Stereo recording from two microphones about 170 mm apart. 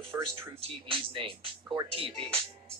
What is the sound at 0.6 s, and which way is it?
Speech, 35° right (ahead or behind).